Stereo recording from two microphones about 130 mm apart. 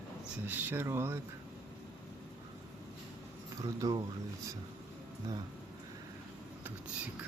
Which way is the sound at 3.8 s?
25° right (ahead or behind).